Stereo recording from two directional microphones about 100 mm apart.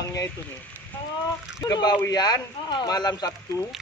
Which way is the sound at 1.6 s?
40° left (ahead or behind).